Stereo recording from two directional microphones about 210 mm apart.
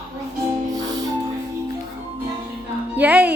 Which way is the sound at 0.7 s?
15° right (ahead or behind).